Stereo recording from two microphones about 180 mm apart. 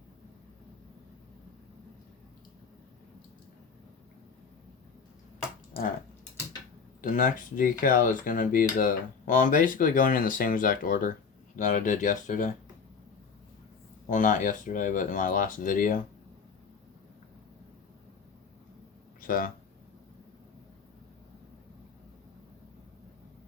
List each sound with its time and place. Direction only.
7.0 s speech: 45° left (ahead or behind)
14.1 s speech: 45° left (ahead or behind)
19.2 s speech: 50° left (ahead or behind)